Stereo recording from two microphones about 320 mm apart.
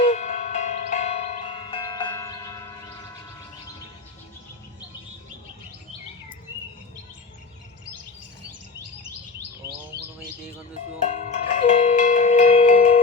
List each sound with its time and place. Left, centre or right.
0.0 s tubular bells: left
11.0 s cowbell: left